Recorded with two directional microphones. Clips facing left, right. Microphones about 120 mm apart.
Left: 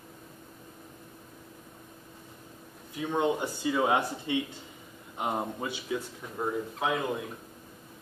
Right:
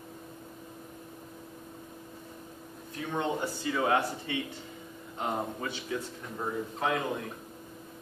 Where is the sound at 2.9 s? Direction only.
15° left (ahead or behind).